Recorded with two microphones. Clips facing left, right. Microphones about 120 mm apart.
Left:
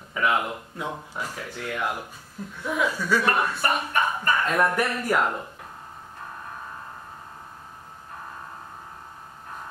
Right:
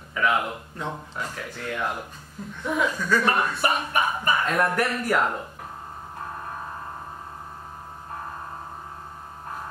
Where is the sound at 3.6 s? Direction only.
15° right (ahead or behind).